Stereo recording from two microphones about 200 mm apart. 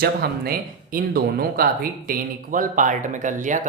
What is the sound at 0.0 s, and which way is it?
Speech, 50° right (ahead or behind).